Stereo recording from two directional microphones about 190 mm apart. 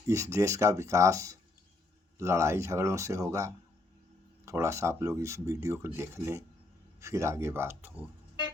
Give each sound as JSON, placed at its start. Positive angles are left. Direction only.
{"t": 0.1, "sound": "speech", "side_deg": -15}